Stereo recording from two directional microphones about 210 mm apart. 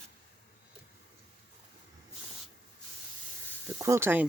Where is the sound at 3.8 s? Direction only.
10° right (ahead or behind).